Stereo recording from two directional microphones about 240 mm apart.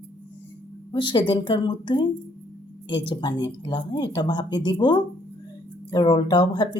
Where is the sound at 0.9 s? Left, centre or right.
Centre.